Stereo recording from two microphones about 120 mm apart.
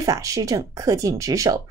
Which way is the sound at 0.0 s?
30° right (ahead or behind).